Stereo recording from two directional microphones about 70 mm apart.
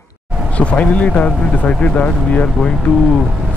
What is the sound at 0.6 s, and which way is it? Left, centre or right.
Speech, centre.